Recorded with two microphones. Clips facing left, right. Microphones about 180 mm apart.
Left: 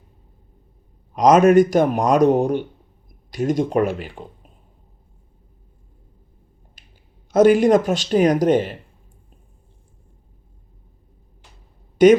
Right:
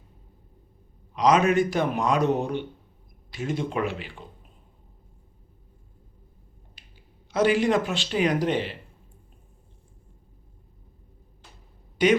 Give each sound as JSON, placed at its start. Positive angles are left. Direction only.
{"t": 1.1, "sound": "speech", "side_deg": 45}
{"t": 6.8, "sound": "a sound", "side_deg": 45}
{"t": 7.3, "sound": "speech", "side_deg": 45}
{"t": 12.0, "sound": "speech", "side_deg": 45}